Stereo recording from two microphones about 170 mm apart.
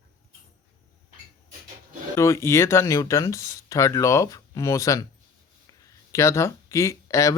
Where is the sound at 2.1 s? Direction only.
15° left (ahead or behind).